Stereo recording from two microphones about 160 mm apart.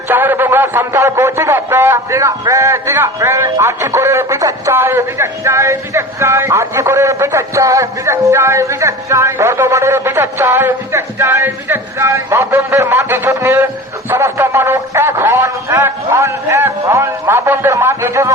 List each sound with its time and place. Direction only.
0.1 s a man's voice: 10° right (ahead or behind)